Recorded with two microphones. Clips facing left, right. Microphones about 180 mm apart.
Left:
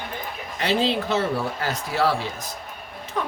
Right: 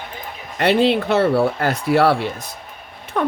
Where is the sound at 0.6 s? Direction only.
60° right (ahead or behind).